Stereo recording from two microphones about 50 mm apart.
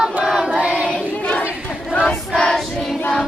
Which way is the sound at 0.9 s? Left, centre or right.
Left.